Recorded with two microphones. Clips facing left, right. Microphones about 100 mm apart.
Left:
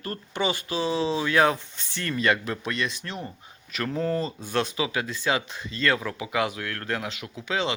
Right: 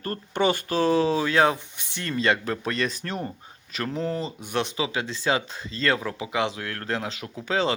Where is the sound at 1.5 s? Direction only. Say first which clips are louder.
Left 1 dB; 15° right (ahead or behind).